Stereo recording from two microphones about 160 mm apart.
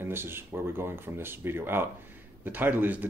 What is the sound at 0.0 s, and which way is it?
Speech, 15° right (ahead or behind).